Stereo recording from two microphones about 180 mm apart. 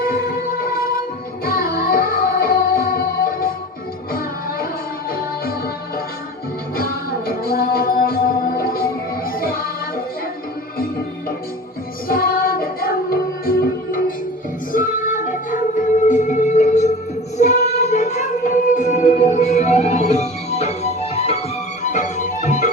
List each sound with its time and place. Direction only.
0.0 s music: 55° left (ahead or behind)
6.7 s music: 55° left (ahead or behind)
12.0 s music: 55° left (ahead or behind)